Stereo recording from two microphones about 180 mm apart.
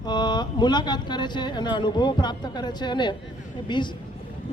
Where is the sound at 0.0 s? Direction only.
25° left (ahead or behind).